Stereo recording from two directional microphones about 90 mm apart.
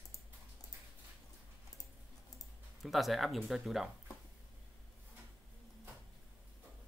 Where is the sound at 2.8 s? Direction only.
Centre (ahead or behind).